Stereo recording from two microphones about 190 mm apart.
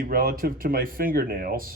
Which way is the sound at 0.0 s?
50° right (ahead or behind).